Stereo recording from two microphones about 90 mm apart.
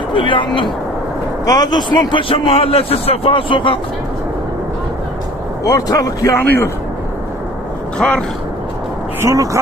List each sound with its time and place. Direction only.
0.1 s speech: 65° left (ahead or behind)
1.5 s a man's voice: 45° left (ahead or behind); by 3.8 s 70° left (ahead or behind)
5.6 s speech: 45° left (ahead or behind)
7.9 s speech: 10° left (ahead or behind)
9.2 s speech: 35° right (ahead or behind)